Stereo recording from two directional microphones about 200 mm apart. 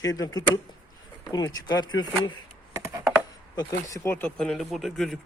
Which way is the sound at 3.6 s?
15° left (ahead or behind).